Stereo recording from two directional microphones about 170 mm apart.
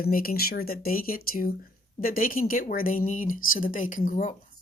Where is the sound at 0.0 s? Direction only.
60° left (ahead or behind).